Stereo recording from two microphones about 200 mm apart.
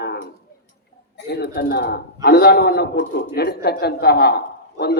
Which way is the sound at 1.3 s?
50° left (ahead or behind).